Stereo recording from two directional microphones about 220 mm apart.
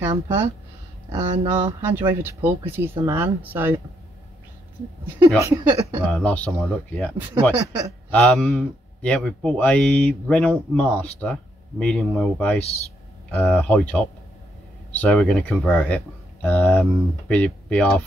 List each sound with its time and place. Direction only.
0.0 s speech: 10° right (ahead or behind)
1.1 s speech: 20° right (ahead or behind)
1.9 s speech: 10° right (ahead or behind)
5.4 s speech: 15° right (ahead or behind)
6.1 s speech: 5° left (ahead or behind)